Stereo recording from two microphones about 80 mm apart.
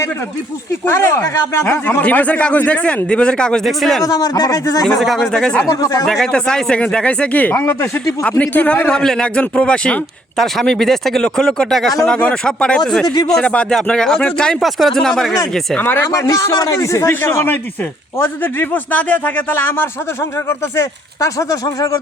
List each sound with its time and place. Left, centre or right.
0.9 s speech: left
1.6 s speech: left; by 4.0 s centre
4.0 s speech: left
4.9 s speech: centre
5.2 s speech: centre
5.6 s speech: left
6.1 s speech: centre
7.5 s speech: left
8.2 s speech: centre
15.8 s speech: left
16.1 s speech: left